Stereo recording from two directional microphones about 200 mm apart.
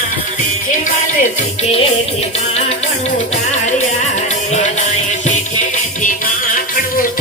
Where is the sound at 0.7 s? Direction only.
40° left (ahead or behind).